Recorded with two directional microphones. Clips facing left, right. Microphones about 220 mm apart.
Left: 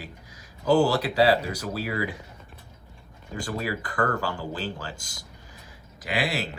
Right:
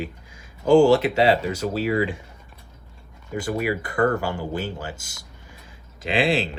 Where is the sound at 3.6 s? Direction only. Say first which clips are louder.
Right 5 dB; 25° right (ahead or behind).